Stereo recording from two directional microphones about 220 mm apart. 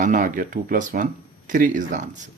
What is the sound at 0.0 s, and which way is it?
Speech, 35° right (ahead or behind).